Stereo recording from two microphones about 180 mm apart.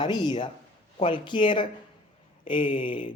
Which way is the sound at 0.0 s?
25° left (ahead or behind).